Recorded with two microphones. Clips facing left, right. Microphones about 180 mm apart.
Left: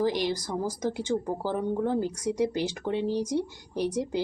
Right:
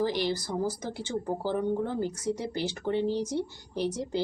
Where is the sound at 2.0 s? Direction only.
10° left (ahead or behind).